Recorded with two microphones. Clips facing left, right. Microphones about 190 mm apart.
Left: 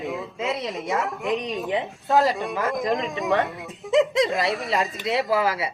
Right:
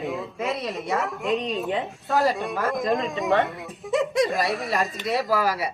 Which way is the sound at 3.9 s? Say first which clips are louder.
Left 3 dB; 20° left (ahead or behind).